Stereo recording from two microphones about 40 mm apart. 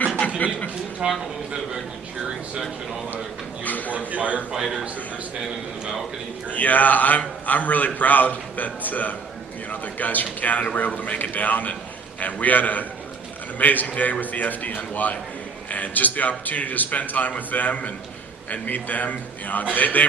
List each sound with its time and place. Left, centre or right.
0.3 s a man's voice: left
1.0 s speech: right
3.6 s a sound: left
3.9 s a man's voice: right
4.6 s a man's voice: centre
6.5 s a man's voice: left